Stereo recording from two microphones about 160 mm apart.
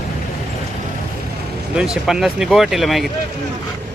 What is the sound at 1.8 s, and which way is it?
Speech, 5° right (ahead or behind).